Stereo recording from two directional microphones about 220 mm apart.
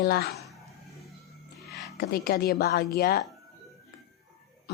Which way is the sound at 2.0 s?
45° left (ahead or behind).